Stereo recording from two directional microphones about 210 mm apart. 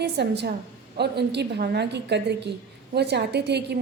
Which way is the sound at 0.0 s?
50° right (ahead or behind).